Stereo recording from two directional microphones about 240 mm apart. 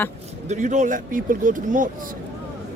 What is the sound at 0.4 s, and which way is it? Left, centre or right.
Speech, right.